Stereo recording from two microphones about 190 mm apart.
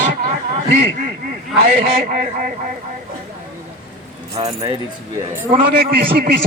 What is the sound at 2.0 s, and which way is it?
Speech, 45° right (ahead or behind).